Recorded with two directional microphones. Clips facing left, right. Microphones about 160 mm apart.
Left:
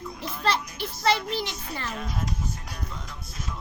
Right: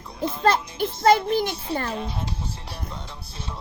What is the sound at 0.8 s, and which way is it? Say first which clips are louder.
Speech: right 9 dB; 45° right (ahead or behind).